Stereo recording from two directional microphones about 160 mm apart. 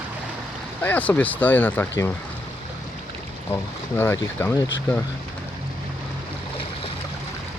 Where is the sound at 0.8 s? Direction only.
10° left (ahead or behind).